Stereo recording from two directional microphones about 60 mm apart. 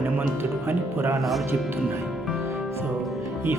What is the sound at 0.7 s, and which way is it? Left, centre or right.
Speech, right.